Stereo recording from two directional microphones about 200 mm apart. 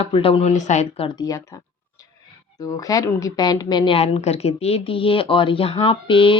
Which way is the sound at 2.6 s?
15° left (ahead or behind).